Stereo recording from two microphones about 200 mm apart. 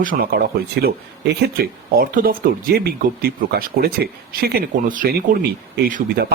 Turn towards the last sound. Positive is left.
turn(degrees=-50)  # may be behind; listen again after turning